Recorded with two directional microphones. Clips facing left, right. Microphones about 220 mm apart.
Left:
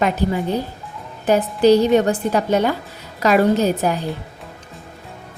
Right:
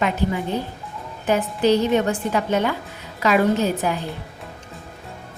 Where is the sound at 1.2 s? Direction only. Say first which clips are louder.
Left 5 dB; 35° left (ahead or behind).